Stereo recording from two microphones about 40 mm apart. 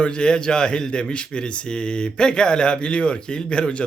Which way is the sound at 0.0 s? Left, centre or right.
Left.